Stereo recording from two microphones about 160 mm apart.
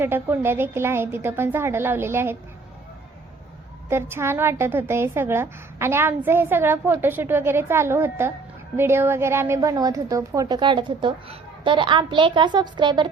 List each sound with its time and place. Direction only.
0.0 s a woman's voice: 15° right (ahead or behind)
3.8 s a woman's voice: 15° right (ahead or behind)